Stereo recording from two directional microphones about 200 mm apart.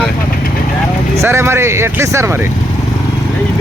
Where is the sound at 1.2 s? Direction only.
15° right (ahead or behind).